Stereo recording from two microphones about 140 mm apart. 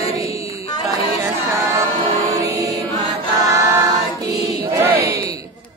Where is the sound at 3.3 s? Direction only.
25° right (ahead or behind).